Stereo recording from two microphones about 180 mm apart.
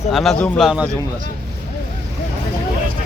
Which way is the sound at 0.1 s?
Centre (ahead or behind).